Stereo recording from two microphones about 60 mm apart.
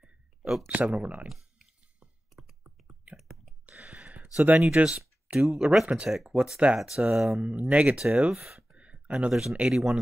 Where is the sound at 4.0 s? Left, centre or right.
Right.